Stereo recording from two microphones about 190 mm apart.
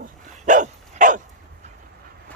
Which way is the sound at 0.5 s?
40° right (ahead or behind).